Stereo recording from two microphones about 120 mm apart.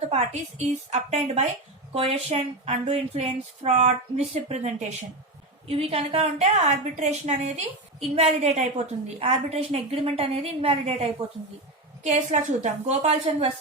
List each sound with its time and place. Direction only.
0.1 s a woman's voice: 70° right (ahead or behind)
1.9 s speech: 55° right (ahead or behind)
5.6 s speech: 55° right (ahead or behind)
12.0 s a woman's voice: 75° right (ahead or behind)